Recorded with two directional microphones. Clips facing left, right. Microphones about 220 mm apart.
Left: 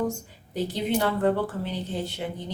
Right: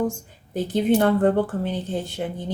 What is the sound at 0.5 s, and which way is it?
Speech, 50° right (ahead or behind).